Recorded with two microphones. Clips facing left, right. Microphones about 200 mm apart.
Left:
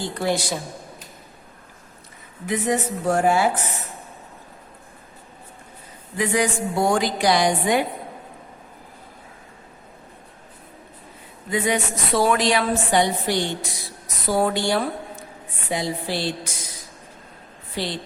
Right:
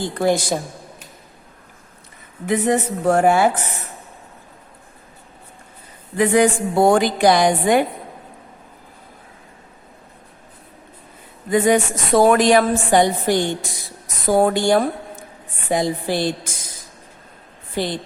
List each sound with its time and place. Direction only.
0.2 s a woman's voice: 50° right (ahead or behind)
2.5 s a woman's voice: 55° right (ahead or behind)
6.1 s a woman's voice: 55° right (ahead or behind)
11.5 s a woman's voice: 50° right (ahead or behind)
17.7 s a woman's voice: 50° right (ahead or behind)